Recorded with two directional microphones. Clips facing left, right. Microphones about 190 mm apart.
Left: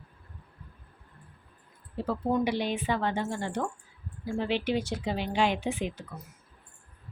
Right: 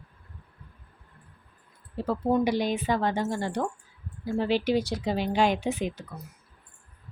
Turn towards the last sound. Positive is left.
turn(degrees=-40)  # may be behind; listen again after turning